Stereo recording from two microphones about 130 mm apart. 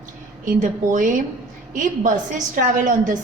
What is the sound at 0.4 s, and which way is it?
A woman's voice, 85° right.